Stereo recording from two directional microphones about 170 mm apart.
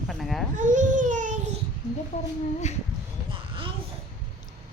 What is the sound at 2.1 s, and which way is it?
Speech, 40° left (ahead or behind).